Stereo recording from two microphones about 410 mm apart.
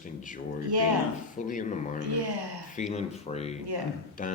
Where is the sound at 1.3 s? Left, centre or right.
Centre.